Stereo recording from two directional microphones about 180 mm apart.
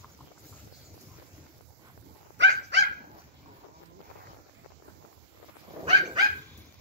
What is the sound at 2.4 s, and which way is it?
Dog, 90° right.